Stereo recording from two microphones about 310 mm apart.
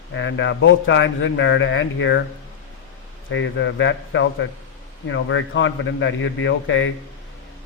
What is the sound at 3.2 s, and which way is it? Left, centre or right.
A man's voice, left.